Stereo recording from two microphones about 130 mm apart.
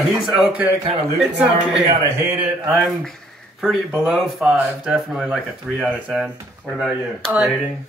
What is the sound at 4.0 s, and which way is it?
Speech, 5° right (ahead or behind).